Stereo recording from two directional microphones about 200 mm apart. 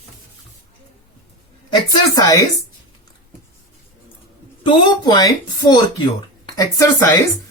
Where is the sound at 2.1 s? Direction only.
15° left (ahead or behind).